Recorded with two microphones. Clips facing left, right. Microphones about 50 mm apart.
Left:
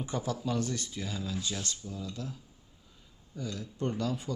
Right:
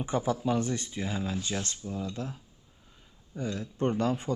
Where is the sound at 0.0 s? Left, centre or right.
Right.